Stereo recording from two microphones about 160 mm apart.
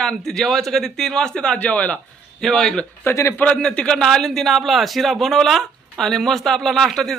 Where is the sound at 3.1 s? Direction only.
15° left (ahead or behind).